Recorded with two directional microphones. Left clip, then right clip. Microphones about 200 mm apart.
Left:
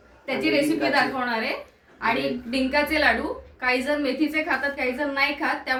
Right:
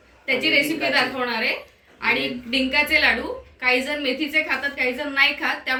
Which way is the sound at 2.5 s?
25° left (ahead or behind).